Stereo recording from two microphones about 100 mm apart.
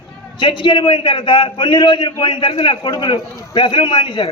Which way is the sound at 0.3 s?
55° left (ahead or behind).